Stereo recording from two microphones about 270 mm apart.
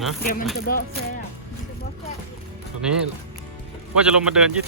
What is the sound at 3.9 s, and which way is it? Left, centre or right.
Speech, centre.